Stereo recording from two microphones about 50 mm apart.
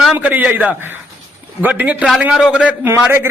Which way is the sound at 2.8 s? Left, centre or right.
Right.